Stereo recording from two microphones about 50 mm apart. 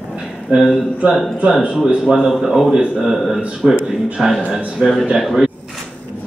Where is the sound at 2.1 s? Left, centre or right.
Centre.